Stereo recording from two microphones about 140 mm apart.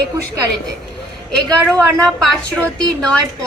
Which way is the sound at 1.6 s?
5° left (ahead or behind).